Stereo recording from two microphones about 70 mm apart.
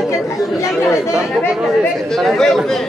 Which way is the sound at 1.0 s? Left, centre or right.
Centre.